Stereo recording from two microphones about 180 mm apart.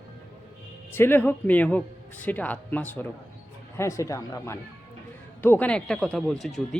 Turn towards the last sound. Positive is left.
turn(degrees=0)  # may be behind; listen again after turning